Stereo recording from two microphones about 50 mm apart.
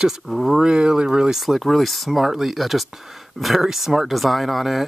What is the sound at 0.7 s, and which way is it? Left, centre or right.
Speech, centre.